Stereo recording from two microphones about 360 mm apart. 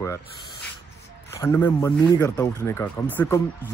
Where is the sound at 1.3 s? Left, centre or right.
Centre.